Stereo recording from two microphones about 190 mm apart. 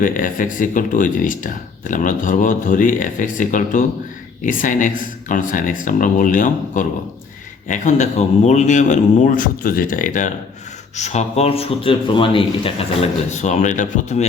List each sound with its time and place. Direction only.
0.0 s speech: 45° left (ahead or behind)